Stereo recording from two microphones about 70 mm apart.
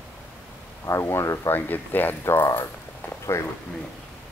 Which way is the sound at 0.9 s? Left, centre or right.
Left.